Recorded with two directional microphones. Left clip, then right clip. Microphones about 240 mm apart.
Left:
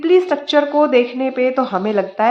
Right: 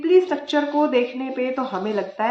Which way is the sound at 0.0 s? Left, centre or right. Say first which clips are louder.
Left 3 dB; left.